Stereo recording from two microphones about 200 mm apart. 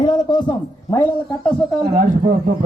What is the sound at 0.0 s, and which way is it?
A man's voice, 20° left (ahead or behind).